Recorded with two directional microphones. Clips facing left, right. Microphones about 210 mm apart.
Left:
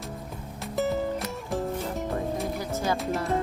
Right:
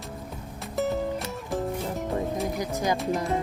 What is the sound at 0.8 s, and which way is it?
Music, centre (ahead or behind).